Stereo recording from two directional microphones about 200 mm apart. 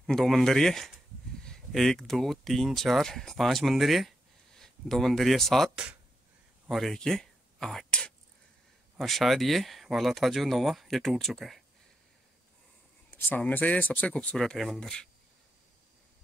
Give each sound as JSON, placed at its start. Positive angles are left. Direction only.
{"t": 0.0, "sound": "speech", "side_deg": 0}
{"t": 13.1, "sound": "speech", "side_deg": 10}